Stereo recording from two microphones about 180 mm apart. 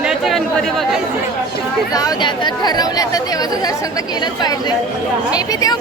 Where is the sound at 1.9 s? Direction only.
20° left (ahead or behind).